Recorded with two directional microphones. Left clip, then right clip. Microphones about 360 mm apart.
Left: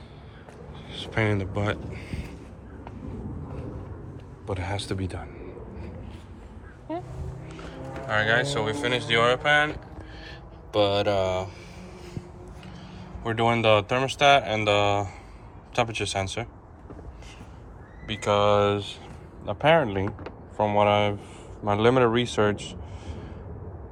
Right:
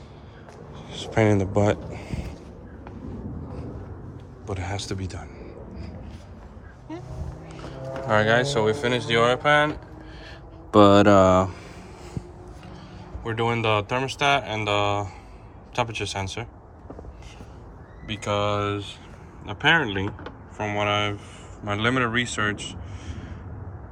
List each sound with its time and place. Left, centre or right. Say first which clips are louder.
0.9 s speech: right 5 dB; centre
4.4 s a sound: even; centre
6.9 s vehicle: left 5 dB; centre
7.4 s speech: right 4 dB; centre
10.8 s speech: right 8 dB; right
13.2 s speech: left 2 dB; centre
18.0 s speech: left 3 dB; centre